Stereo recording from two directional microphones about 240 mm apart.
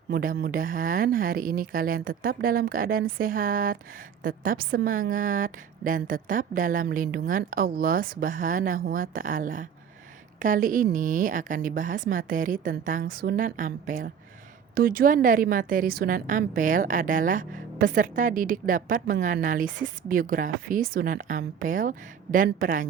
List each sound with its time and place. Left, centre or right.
0.1 s a woman's voice: right